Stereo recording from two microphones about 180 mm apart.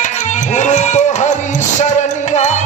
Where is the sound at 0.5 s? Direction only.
40° left (ahead or behind).